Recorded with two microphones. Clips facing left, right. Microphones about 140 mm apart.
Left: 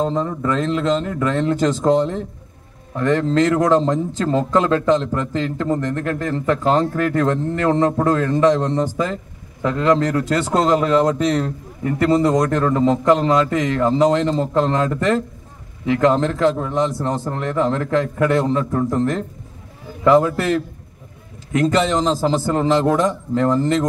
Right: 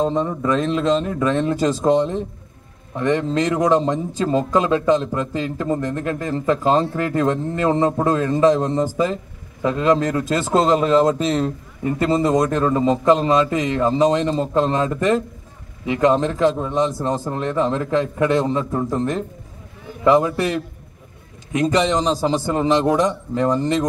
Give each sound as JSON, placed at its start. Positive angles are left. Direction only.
{"t": 0.0, "sound": "a man's voice", "side_deg": -20}